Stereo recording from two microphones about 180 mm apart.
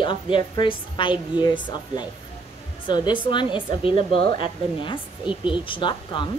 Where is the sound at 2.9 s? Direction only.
25° left (ahead or behind).